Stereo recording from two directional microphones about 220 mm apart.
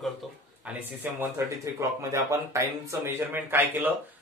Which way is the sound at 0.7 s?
10° right (ahead or behind).